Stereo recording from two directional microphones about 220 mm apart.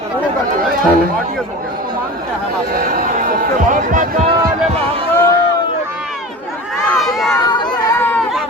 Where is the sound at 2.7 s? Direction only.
40° right (ahead or behind).